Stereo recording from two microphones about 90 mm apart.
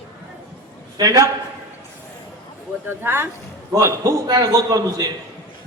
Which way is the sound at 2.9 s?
25° right (ahead or behind).